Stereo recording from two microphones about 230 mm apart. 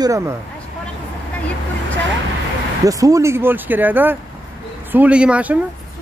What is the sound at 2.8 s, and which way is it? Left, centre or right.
Speech, centre.